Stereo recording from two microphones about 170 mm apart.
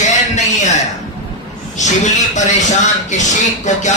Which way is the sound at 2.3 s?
45° left (ahead or behind).